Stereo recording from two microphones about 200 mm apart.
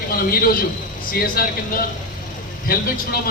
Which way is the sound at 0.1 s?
45° left (ahead or behind).